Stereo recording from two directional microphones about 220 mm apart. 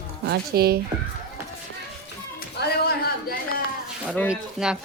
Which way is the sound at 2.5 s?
45° left (ahead or behind).